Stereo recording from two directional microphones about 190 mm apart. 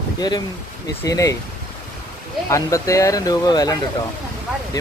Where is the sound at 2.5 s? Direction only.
15° left (ahead or behind).